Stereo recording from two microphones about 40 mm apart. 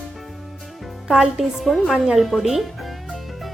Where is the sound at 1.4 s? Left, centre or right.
Centre.